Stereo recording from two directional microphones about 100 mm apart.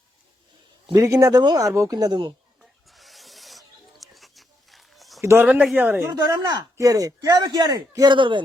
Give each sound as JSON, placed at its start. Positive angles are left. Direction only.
{"t": 0.9, "sound": "a man's voice", "side_deg": -35}
{"t": 2.6, "sound": "rub", "side_deg": 0}
{"t": 5.2, "sound": "a woman's voice", "side_deg": -25}
{"t": 6.1, "sound": "a man's voice", "side_deg": -30}